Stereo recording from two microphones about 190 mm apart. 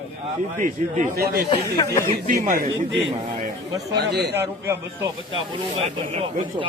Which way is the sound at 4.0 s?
60° right (ahead or behind).